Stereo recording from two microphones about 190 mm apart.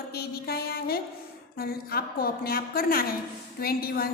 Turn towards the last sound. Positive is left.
turn(degrees=55)  # may be behind; listen again after turning